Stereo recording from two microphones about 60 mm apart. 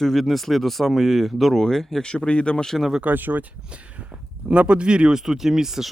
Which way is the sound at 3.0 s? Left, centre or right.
Right.